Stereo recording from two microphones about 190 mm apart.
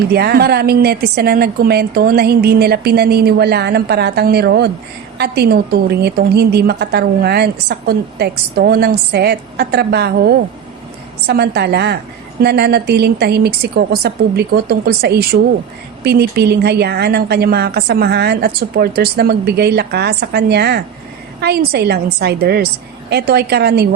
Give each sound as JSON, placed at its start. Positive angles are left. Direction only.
{"t": 0.1, "sound": "a woman's voice", "side_deg": -55}